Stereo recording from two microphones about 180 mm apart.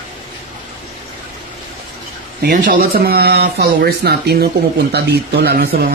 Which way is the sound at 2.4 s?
50° right (ahead or behind).